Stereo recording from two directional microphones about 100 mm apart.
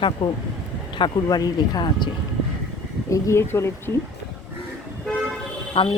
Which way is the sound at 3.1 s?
30° left (ahead or behind).